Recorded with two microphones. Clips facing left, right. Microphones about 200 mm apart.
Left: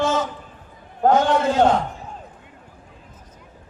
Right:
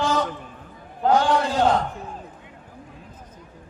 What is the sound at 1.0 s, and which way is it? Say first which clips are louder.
Speech: left 2 dB; 45° left (ahead or behind).